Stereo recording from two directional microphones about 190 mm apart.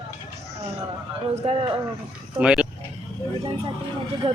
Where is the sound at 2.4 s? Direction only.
5° right (ahead or behind).